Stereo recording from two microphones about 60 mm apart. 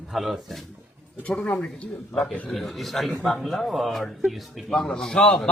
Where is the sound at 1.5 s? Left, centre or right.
Centre.